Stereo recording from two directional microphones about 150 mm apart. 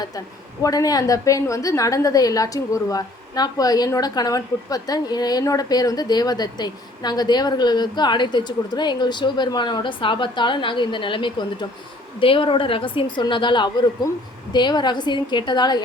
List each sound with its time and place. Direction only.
0.6 s a woman's voice: 25° left (ahead or behind)